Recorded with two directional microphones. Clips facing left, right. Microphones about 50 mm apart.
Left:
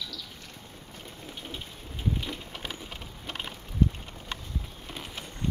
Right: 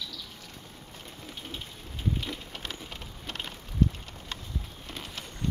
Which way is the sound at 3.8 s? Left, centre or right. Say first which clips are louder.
Even; centre.